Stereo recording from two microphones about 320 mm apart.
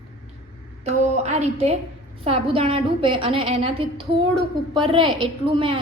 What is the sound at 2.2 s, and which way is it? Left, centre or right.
A woman's voice, centre.